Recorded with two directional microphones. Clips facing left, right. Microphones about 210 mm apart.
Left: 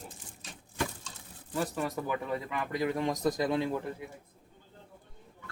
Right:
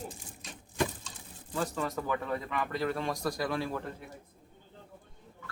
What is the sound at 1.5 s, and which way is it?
Speech, 15° left (ahead or behind).